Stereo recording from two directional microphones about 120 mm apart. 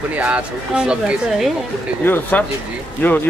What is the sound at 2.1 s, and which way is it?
Speech, 15° left (ahead or behind).